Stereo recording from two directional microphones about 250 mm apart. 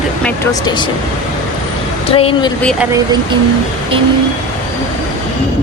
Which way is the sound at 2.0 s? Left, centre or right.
Left.